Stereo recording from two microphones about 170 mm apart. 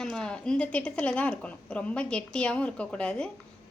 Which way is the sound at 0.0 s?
5° left (ahead or behind).